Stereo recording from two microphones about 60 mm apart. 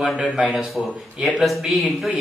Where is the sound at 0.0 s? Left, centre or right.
Centre.